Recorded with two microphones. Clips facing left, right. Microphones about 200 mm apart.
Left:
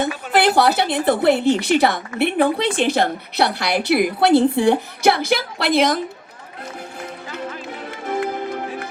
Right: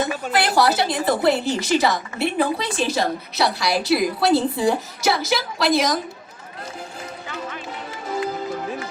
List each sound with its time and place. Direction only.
0.0 s a woman's voice: 60° left (ahead or behind)
7.9 s music: 60° left (ahead or behind)